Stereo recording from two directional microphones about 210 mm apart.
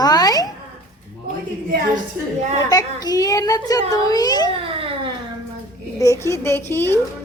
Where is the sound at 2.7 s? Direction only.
15° left (ahead or behind).